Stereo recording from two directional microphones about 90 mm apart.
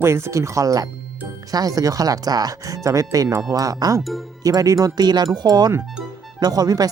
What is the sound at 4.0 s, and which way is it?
Speech, centre (ahead or behind).